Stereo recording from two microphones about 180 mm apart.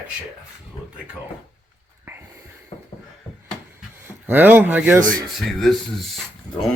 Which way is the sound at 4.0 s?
10° right (ahead or behind).